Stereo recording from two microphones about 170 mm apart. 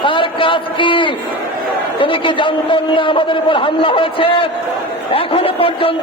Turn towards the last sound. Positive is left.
turn(degrees=30)  # may be behind; listen again after turning